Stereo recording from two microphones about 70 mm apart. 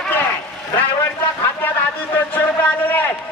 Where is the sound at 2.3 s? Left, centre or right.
Left.